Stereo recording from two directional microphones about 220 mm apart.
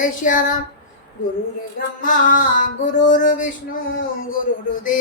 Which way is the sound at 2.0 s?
35° left (ahead or behind).